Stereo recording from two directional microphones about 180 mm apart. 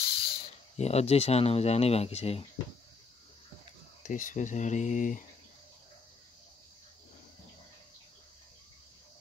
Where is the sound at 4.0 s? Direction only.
45° left (ahead or behind).